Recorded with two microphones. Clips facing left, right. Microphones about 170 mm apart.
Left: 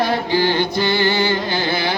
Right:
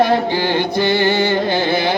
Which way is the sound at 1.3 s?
55° right (ahead or behind).